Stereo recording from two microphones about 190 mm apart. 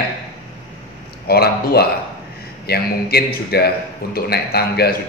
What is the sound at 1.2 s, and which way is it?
A man's voice, 55° left (ahead or behind).